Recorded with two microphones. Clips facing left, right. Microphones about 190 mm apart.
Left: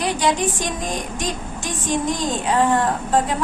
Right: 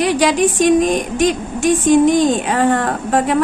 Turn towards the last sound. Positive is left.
turn(degrees=-70)  # may be behind; listen again after turning